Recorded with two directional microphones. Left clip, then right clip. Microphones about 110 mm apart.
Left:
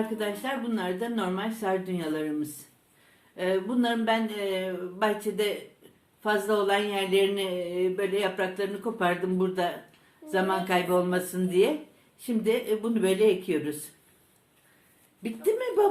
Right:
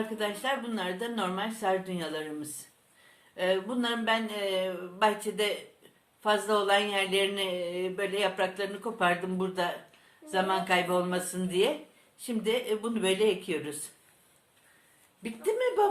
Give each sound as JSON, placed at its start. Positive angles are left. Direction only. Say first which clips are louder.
{"t": 0.8, "sound": "speech", "louder": "left 2 dB", "side_deg": -40}
{"t": 15.4, "sound": "speech", "louder": "left 2 dB", "side_deg": -25}